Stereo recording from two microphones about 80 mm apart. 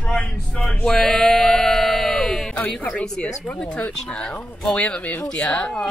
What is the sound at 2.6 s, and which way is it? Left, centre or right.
Speech, centre.